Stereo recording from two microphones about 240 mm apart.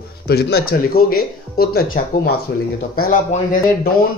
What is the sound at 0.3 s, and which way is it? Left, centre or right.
Speech, left.